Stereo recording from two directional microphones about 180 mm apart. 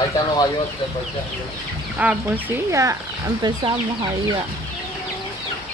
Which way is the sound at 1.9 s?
10° right (ahead or behind).